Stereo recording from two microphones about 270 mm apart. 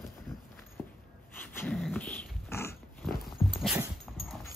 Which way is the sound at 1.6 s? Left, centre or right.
Centre.